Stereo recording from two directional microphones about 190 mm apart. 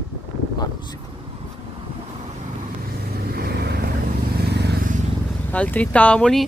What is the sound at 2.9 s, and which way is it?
Vehicle, 55° right (ahead or behind).